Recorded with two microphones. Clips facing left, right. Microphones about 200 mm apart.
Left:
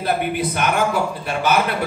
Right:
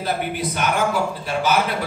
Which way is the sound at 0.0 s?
55° left (ahead or behind).